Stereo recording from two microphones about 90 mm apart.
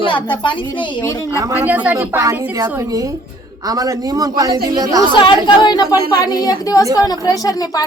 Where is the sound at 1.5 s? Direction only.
20° right (ahead or behind).